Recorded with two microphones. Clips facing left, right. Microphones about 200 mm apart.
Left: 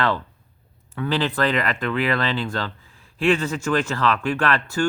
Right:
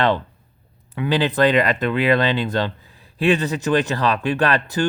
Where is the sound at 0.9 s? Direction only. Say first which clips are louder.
Right 4 dB; 15° right (ahead or behind).